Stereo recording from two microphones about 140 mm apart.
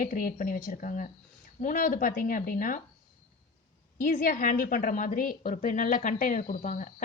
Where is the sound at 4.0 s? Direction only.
90° left.